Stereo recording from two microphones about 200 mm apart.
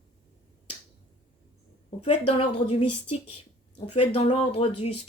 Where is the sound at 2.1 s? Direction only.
30° left (ahead or behind).